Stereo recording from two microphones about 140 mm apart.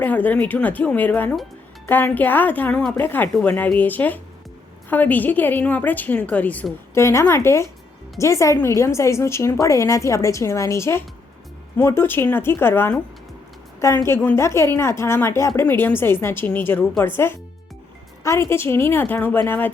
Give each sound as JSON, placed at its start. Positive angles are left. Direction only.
{"t": 0.0, "sound": "a woman's voice", "side_deg": 10}
{"t": 6.9, "sound": "a woman's voice", "side_deg": 20}